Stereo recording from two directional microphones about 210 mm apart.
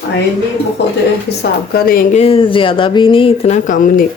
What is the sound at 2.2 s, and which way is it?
Speech, 25° left (ahead or behind).